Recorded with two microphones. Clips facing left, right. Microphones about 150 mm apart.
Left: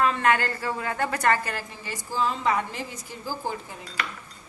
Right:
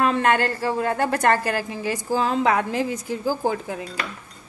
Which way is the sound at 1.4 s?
90° right.